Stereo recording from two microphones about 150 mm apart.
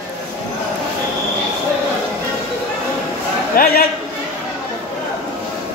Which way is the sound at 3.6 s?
70° left (ahead or behind).